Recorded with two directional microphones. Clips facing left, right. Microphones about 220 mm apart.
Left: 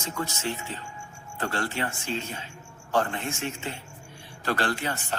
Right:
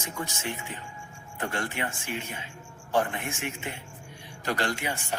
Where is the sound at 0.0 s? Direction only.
15° right (ahead or behind).